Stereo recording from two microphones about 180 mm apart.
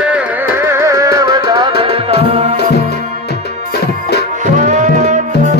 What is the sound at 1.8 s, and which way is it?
Tabla, 35° right (ahead or behind).